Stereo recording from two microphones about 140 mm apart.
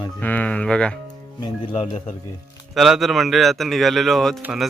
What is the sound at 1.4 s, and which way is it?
Speech, 45° left (ahead or behind).